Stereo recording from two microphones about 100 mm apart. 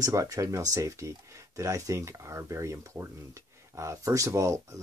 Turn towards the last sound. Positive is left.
turn(degrees=-30)  # may be behind; listen again after turning